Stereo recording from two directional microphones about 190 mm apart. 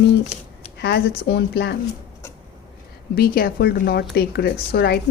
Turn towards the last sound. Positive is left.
turn(degrees=55)  # may be behind; listen again after turning